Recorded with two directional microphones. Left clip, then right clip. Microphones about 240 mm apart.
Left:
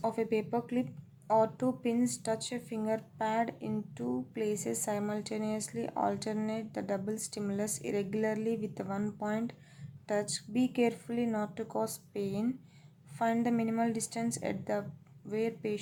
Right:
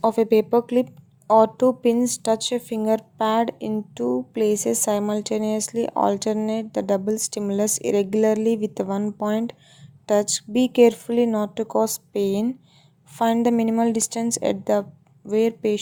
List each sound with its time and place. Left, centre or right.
0.0 s speech: right